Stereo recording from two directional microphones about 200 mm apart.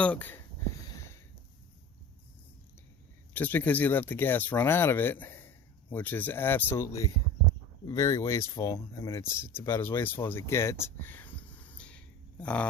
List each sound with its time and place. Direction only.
0.0 s speech: 5° left (ahead or behind)
0.8 s sniff: 15° left (ahead or behind)
3.3 s speech: 10° left (ahead or behind)